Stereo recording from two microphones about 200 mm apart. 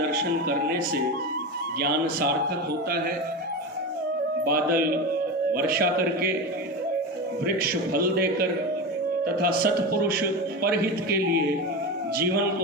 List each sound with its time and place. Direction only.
4.4 s a man's voice: 50° right (ahead or behind)
7.4 s a man's voice: 50° right (ahead or behind)